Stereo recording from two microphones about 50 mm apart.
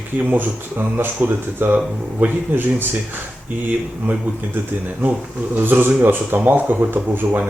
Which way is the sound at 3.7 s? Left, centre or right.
Right.